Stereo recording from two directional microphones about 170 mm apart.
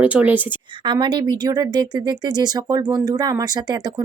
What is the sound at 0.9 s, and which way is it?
Speech, 25° right (ahead or behind).